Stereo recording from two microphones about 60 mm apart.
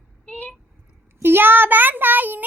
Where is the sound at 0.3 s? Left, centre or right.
Left.